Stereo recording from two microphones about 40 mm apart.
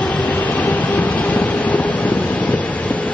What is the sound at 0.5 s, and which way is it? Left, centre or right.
Vehicle, left.